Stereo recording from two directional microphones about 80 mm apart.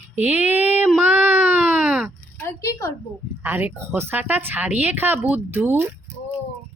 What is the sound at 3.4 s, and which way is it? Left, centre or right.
A woman's voice, right.